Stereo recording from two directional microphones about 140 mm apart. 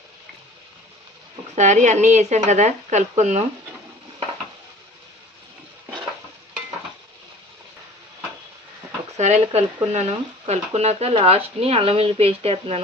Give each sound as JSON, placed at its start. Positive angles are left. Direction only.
{"t": 1.5, "sound": "speech", "side_deg": -60}
{"t": 9.1, "sound": "speech", "side_deg": -55}